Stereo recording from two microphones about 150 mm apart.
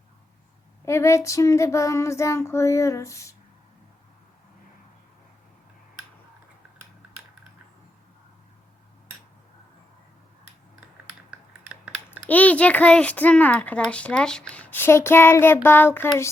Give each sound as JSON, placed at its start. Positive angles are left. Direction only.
{"t": 0.9, "sound": "child singing", "side_deg": 20}
{"t": 11.3, "sound": "a sound", "side_deg": -5}
{"t": 12.3, "sound": "a child's voice", "side_deg": 10}